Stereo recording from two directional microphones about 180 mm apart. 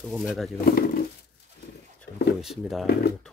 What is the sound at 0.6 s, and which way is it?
Speech, 55° left (ahead or behind).